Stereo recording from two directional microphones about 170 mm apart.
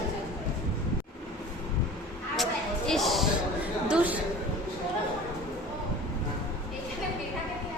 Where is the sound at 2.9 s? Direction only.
Centre (ahead or behind).